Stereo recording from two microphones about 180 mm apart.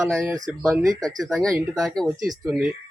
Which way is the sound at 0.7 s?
20° right (ahead or behind).